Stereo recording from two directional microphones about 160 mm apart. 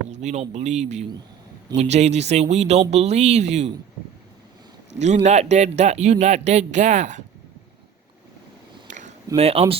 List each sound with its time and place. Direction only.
0.1 s a man's voice: 45° right (ahead or behind)
4.9 s a man's voice: 45° right (ahead or behind)
8.9 s a sound: 50° right (ahead or behind)
9.3 s speech: 40° right (ahead or behind)